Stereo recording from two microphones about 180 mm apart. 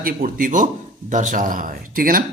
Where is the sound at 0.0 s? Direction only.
50° right (ahead or behind).